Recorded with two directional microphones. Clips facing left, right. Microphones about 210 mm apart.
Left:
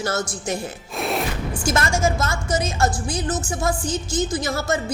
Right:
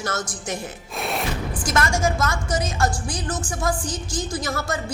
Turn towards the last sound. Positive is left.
turn(degrees=25)  # may be behind; listen again after turning